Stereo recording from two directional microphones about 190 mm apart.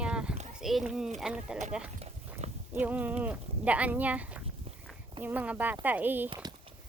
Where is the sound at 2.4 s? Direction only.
35° right (ahead or behind).